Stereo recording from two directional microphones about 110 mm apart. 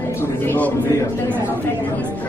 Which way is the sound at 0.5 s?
15° left (ahead or behind).